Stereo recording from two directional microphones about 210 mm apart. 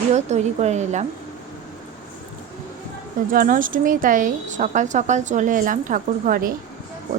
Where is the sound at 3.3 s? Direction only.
40° right (ahead or behind).